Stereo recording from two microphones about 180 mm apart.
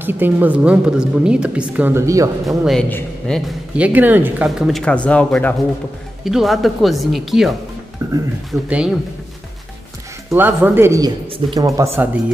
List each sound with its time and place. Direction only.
0.0 s speech: 10° right (ahead or behind)
2.4 s speech: centre (ahead or behind)
3.7 s speech: 10° right (ahead or behind)
8.0 s speech: 15° right (ahead or behind)
8.5 s speech: 5° right (ahead or behind)
10.3 s speech: 10° right (ahead or behind)
11.2 s speech: 30° right (ahead or behind)
11.6 s speech: 20° right (ahead or behind)